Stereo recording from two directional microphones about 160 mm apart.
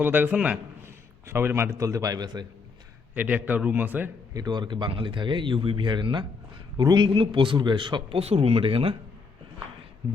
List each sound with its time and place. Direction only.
0.0 s a man's voice: 10° right (ahead or behind)
3.2 s a man's voice: 10° right (ahead or behind)
4.4 s a man's voice: 25° right (ahead or behind)